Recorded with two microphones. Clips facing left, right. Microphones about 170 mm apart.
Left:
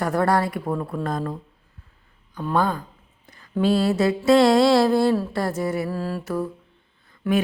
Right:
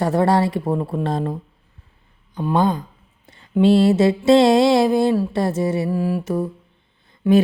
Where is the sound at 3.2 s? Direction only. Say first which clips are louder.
Right 2 dB; 25° right (ahead or behind).